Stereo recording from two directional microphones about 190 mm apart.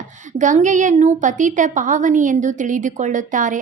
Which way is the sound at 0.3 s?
40° right (ahead or behind).